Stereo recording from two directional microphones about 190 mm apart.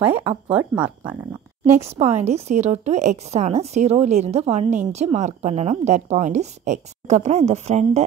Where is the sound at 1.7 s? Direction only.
35° right (ahead or behind).